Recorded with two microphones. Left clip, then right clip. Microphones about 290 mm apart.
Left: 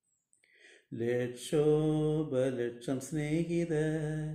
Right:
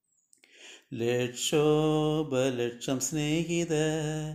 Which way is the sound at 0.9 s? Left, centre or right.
Centre.